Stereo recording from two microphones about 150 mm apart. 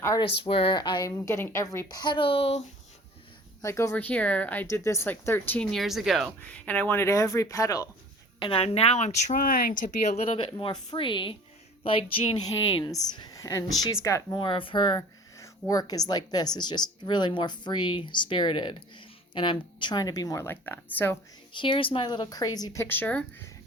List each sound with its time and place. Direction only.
0.2 s speech: 35° left (ahead or behind)
3.6 s speech: 20° left (ahead or behind)
5.7 s speech: centre (ahead or behind); by 7.9 s 20° left (ahead or behind)
8.4 s speech: 35° left (ahead or behind); by 14.3 s 20° left (ahead or behind)
14.3 s speech: 35° left (ahead or behind); by 21.2 s 15° left (ahead or behind)
21.5 s speech: 35° left (ahead or behind); by 23.2 s 10° left (ahead or behind)